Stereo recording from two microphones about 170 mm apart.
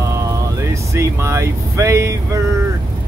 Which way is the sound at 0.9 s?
15° right (ahead or behind).